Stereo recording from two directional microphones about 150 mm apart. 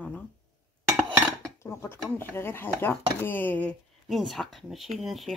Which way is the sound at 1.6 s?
20° left (ahead or behind).